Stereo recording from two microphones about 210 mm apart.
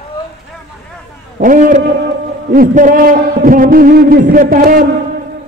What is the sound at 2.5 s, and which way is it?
A man's voice, 40° right (ahead or behind).